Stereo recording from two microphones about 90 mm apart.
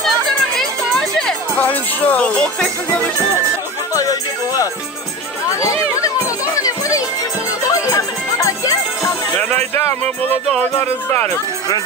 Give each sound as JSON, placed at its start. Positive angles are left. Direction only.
{"t": 0.6, "sound": "music", "side_deg": 5}
{"t": 1.6, "sound": "speech", "side_deg": 20}
{"t": 3.9, "sound": "music", "side_deg": 40}
{"t": 9.4, "sound": "speech", "side_deg": 20}